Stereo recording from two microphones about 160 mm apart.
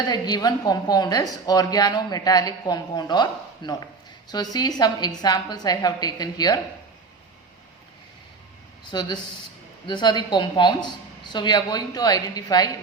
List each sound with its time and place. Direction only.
0.1 s a woman's voice: 25° left (ahead or behind)
8.9 s a woman's voice: 30° left (ahead or behind)